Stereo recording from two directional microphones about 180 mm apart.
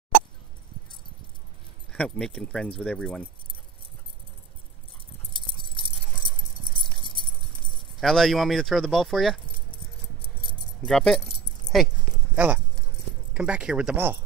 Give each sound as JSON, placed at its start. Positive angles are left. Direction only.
{"t": 1.9, "sound": "speech", "side_deg": 5}
{"t": 5.5, "sound": "a sound", "side_deg": 30}
{"t": 7.7, "sound": "speech", "side_deg": 0}
{"t": 10.9, "sound": "speech", "side_deg": 0}
{"t": 13.3, "sound": "speech", "side_deg": -5}